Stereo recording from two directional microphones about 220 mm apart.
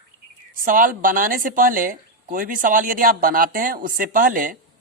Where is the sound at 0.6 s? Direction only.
40° right (ahead or behind).